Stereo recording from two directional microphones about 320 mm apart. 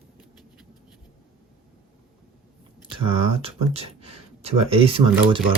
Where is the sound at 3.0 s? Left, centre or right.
Centre.